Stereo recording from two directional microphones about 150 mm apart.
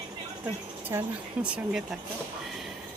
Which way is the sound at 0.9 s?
20° right (ahead or behind).